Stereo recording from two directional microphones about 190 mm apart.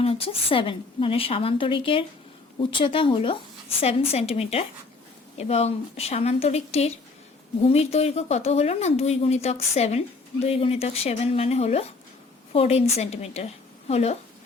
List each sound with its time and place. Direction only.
0.0 s a woman's voice: 30° left (ahead or behind)